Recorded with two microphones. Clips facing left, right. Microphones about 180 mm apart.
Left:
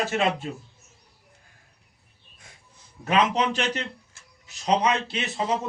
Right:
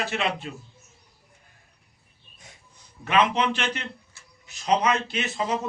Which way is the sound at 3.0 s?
40° left (ahead or behind).